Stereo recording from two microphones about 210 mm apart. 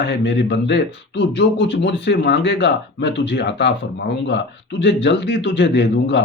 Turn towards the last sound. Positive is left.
turn(degrees=55)  # may be behind; listen again after turning